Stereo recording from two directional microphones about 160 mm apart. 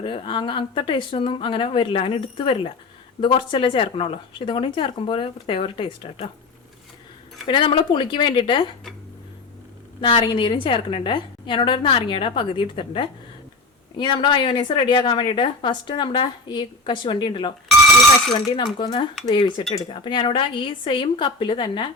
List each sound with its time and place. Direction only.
0.0 s a woman's voice: 30° left (ahead or behind)
7.4 s a woman's voice: 30° left (ahead or behind)
10.0 s a woman's voice: 30° left (ahead or behind)
18.5 s a woman's voice: 30° left (ahead or behind)